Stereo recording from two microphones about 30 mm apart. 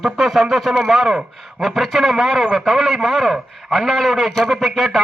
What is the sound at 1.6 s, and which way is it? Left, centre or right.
A man's voice, centre.